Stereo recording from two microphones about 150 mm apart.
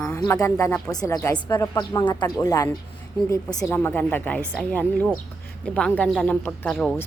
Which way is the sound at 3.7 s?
15° left (ahead or behind).